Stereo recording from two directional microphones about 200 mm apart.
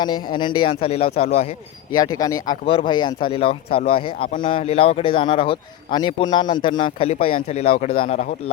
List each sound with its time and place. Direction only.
0.0 s a man's voice: 20° left (ahead or behind)
1.9 s a man's voice: 20° left (ahead or behind)